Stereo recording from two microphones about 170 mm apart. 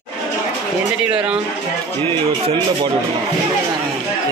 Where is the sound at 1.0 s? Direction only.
5° right (ahead or behind).